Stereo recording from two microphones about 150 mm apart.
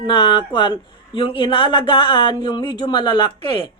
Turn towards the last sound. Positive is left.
turn(degrees=35)  # may be behind; listen again after turning